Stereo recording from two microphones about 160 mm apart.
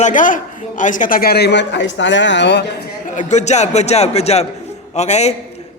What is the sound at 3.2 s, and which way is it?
A man's voice, 45° left (ahead or behind).